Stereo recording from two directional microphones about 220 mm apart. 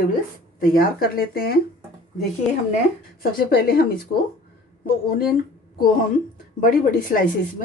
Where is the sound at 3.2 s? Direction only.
45° left (ahead or behind).